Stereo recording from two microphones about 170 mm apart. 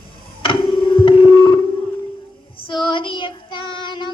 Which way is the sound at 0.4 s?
30° left (ahead or behind).